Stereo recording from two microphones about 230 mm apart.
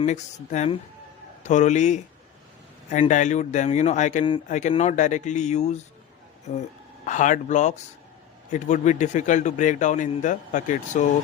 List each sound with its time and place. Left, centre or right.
0.0 s speech: left